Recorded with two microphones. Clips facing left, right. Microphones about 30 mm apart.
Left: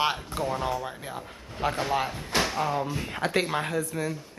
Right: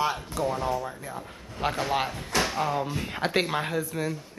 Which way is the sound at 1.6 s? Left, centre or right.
Centre.